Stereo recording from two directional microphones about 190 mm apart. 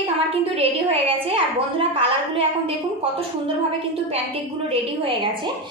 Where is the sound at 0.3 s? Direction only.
30° right (ahead or behind).